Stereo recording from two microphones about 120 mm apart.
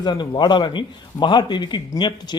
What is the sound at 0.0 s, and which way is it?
A man's voice, 35° left (ahead or behind).